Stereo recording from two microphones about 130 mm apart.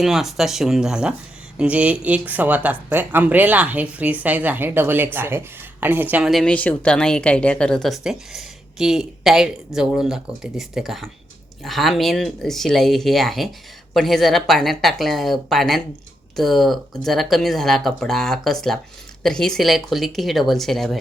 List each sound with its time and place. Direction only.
0.0 s speech: centre (ahead or behind)
6.3 s speech: 5° left (ahead or behind)